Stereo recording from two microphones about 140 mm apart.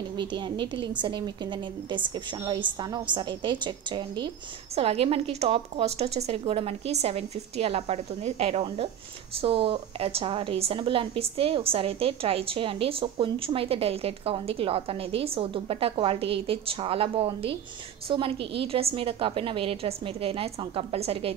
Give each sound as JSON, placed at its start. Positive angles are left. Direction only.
{"t": 0.1, "sound": "a woman's voice", "side_deg": -35}
{"t": 4.7, "sound": "a woman's voice", "side_deg": -45}